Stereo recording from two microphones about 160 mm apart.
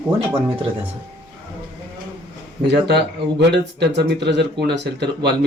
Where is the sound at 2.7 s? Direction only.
90° right.